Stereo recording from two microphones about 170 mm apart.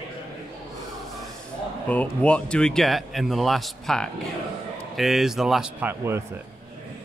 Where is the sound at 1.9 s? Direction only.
5° left (ahead or behind).